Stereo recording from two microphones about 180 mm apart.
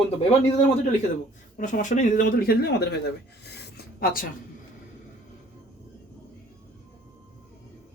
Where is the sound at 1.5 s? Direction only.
45° left (ahead or behind); by 2.9 s 65° left (ahead or behind).